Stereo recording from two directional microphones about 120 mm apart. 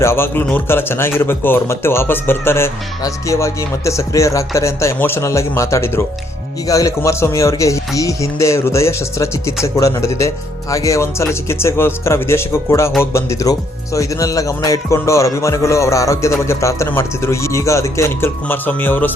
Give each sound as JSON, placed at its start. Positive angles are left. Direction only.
{"t": 0.0, "sound": "speech", "side_deg": 20}